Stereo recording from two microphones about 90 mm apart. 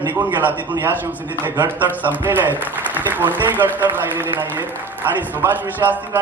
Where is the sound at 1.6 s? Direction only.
20° right (ahead or behind).